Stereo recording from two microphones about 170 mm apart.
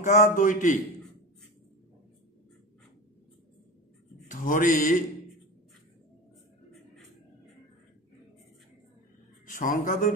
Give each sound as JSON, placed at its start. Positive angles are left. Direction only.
{"t": 0.0, "sound": "a man's voice", "side_deg": 50}
{"t": 4.3, "sound": "a man's voice", "side_deg": 50}
{"t": 9.5, "sound": "a man's voice", "side_deg": 50}